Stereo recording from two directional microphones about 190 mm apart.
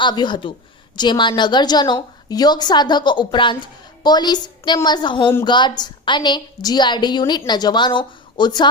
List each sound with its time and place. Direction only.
0.0 s a woman's voice: 25° left (ahead or behind)